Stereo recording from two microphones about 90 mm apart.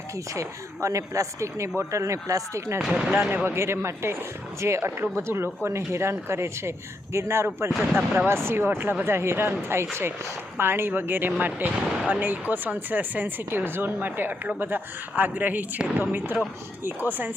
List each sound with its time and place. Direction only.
0.3 s speech: 35° right (ahead or behind)
2.8 s speech: 10° right (ahead or behind)
3.4 s speech: 30° right (ahead or behind)